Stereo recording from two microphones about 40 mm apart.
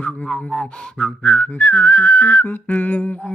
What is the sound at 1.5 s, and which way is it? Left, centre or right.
Whistling, left.